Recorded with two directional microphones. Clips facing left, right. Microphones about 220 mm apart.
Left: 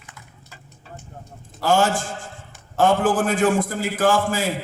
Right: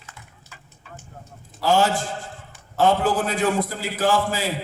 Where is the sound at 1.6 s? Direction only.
50° left (ahead or behind).